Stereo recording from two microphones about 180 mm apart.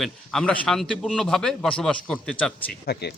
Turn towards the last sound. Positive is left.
turn(degrees=65)  # may be behind; listen again after turning